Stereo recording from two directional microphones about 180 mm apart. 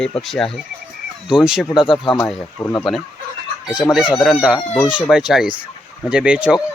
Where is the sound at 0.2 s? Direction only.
Centre (ahead or behind).